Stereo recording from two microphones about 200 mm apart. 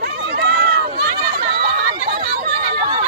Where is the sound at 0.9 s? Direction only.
50° right (ahead or behind).